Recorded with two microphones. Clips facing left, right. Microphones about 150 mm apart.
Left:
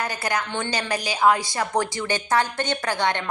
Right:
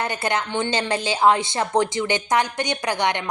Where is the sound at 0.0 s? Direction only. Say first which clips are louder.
Right 2 dB; 25° right (ahead or behind).